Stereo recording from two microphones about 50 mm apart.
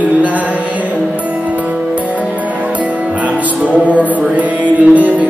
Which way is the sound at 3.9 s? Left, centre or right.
Right.